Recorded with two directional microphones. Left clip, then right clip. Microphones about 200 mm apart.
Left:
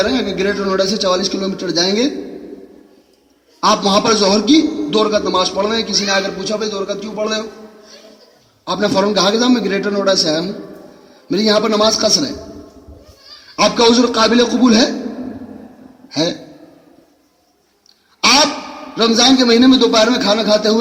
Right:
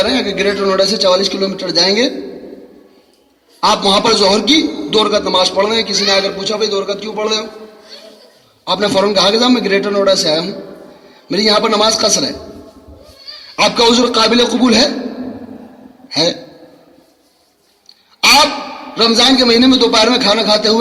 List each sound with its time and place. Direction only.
0.0 s a man's voice: 25° right (ahead or behind)
3.6 s a man's voice: 25° right (ahead or behind)
8.6 s a man's voice: 25° right (ahead or behind)
13.6 s a man's voice: 25° right (ahead or behind)
16.0 s a man's voice: 25° right (ahead or behind)
18.2 s a sound: 25° right (ahead or behind)
18.9 s a man's voice: 25° right (ahead or behind)